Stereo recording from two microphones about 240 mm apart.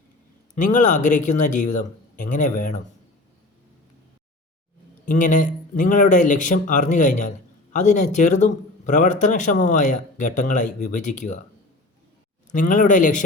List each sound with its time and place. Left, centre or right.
0.5 s speech: left
5.0 s speech: left
12.5 s speech: left